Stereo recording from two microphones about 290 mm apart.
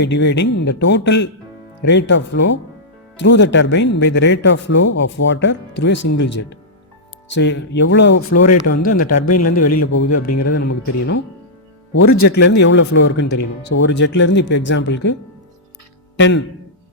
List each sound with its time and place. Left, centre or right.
0.0 s speech: left
4.8 s a man's voice: left
5.2 s speech: left
7.3 s speech: left
8.1 s a man's voice: left
12.4 s speech: left
16.1 s speech: left